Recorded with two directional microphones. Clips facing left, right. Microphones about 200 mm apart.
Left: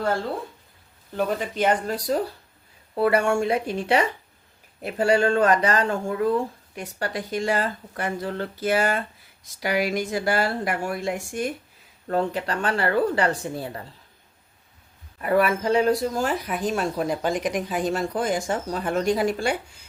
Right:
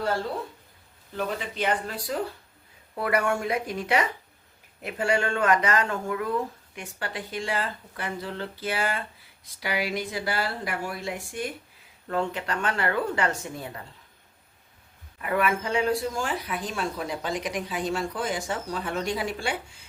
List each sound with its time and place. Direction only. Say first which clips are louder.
1.1 s speech: left 5 dB; 45° left (ahead or behind)
3.0 s speech: left 5 dB; 30° left (ahead or behind)
15.2 s speech: left 5 dB; 35° left (ahead or behind)